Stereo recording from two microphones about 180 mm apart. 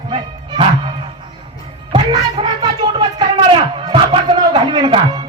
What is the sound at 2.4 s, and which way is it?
Music, 25° right (ahead or behind).